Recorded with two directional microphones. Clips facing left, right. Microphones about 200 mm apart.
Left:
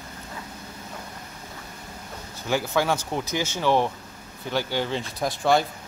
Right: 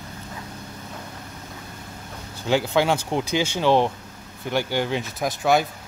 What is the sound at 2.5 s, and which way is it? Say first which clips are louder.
Speech: right 3 dB; 20° right (ahead or behind).